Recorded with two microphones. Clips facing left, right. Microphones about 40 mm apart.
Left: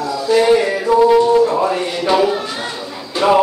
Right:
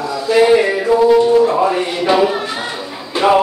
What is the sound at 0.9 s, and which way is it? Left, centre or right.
Music, centre.